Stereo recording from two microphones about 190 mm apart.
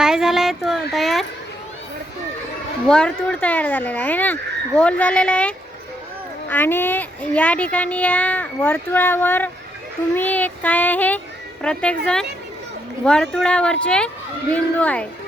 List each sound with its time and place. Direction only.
0.0 s a sound: 5° right (ahead or behind)
2.8 s speech: 5° left (ahead or behind)
13.1 s speech: 5° left (ahead or behind)